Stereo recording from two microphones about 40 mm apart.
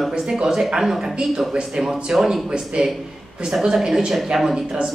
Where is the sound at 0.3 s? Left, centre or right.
Centre.